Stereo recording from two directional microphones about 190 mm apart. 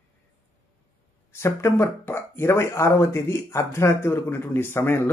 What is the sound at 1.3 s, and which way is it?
Speech, 15° left (ahead or behind).